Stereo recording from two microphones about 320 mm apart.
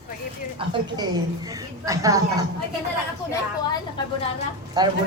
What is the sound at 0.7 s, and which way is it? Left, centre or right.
A man's voice, centre.